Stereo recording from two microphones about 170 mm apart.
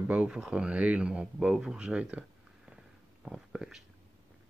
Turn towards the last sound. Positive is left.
turn(degrees=0)  # may be behind; listen again after turning